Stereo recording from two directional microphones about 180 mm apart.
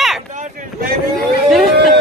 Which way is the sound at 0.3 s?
45° right (ahead or behind).